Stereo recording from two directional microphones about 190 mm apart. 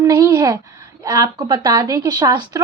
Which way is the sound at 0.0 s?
15° right (ahead or behind).